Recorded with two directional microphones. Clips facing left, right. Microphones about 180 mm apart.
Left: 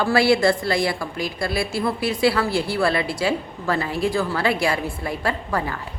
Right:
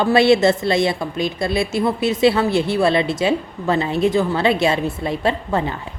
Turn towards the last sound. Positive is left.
turn(degrees=-25)  # may be behind; listen again after turning